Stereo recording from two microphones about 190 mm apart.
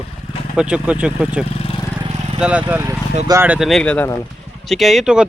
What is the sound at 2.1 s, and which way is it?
Vehicle, 30° right (ahead or behind).